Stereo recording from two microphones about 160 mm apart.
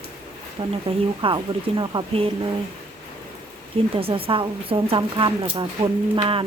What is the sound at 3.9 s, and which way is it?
Speech, 35° right (ahead or behind).